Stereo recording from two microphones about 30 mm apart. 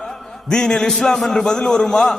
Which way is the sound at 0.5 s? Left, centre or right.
Left.